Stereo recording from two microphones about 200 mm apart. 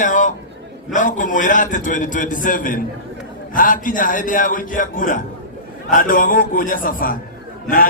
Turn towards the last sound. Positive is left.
turn(degrees=45)  # may be behind; listen again after turning